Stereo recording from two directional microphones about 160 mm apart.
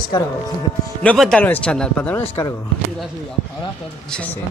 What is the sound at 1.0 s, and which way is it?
Speech, 5° left (ahead or behind).